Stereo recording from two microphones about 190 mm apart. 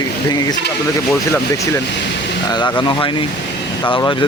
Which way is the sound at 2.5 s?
25° left (ahead or behind).